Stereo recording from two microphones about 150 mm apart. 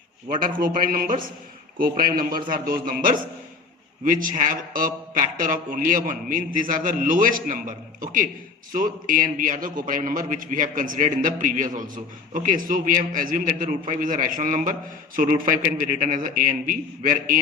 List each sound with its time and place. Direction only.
0.6 s a man's voice: 75° right (ahead or behind)